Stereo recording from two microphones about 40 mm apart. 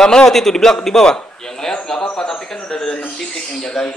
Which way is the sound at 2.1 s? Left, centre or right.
Centre.